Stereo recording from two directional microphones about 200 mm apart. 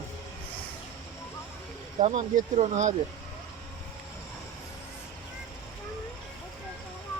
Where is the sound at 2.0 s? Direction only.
40° right (ahead or behind).